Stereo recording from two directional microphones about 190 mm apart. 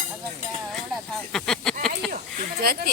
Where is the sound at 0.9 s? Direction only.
Centre (ahead or behind).